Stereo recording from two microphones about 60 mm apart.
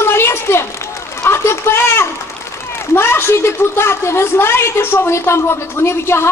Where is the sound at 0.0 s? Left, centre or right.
Left.